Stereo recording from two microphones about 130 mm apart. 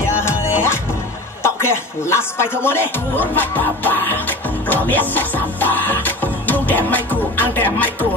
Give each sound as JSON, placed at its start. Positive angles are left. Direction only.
{"t": 0.0, "sound": "music", "side_deg": 20}
{"t": 1.4, "sound": "speech", "side_deg": 20}